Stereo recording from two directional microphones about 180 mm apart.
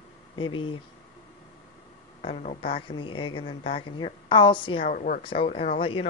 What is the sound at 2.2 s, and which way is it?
Speech, 35° left (ahead or behind).